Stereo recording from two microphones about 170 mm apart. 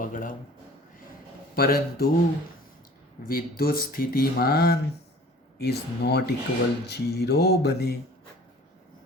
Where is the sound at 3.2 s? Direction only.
60° left (ahead or behind).